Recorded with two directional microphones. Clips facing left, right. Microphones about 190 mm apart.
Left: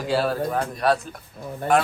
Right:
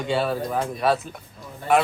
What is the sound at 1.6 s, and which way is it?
Speech, 55° left (ahead or behind).